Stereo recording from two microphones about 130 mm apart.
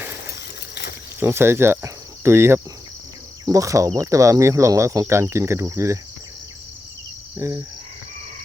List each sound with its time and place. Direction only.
1.2 s speech: 20° right (ahead or behind)
7.3 s speech: 20° right (ahead or behind)